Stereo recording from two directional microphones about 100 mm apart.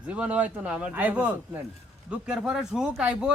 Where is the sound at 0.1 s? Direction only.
15° right (ahead or behind).